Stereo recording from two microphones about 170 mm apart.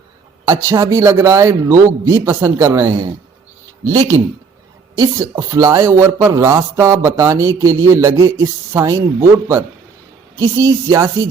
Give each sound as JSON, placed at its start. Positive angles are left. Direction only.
{"t": 0.4, "sound": "speech", "side_deg": -20}
{"t": 10.3, "sound": "speech", "side_deg": -20}